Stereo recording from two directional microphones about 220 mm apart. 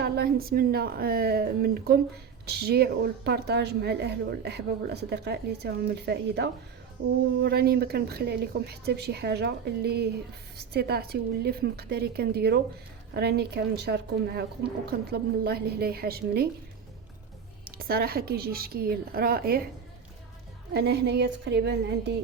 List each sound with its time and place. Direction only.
0.0 s speech: 45° right (ahead or behind)
17.7 s speech: 45° right (ahead or behind)
20.7 s speech: 50° right (ahead or behind)